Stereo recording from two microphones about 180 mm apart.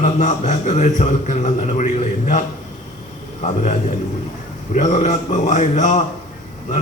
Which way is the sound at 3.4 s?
40° left (ahead or behind).